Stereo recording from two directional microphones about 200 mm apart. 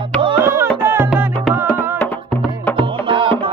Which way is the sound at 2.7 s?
25° right (ahead or behind).